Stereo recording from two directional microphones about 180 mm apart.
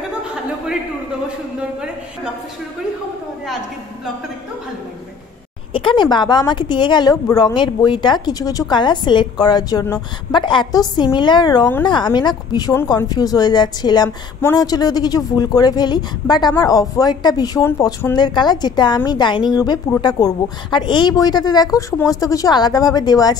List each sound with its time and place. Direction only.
5.7 s speech: 30° left (ahead or behind)